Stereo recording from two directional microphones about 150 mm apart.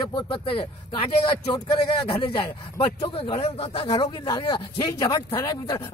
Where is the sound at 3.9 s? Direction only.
25° left (ahead or behind).